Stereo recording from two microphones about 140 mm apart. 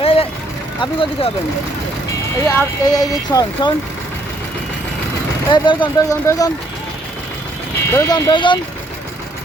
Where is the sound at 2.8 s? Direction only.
25° left (ahead or behind).